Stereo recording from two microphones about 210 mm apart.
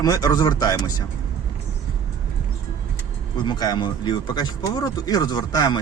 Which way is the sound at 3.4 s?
20° left (ahead or behind).